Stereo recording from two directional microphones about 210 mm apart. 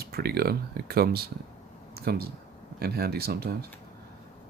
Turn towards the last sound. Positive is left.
turn(degrees=-50)  # may be behind; listen again after turning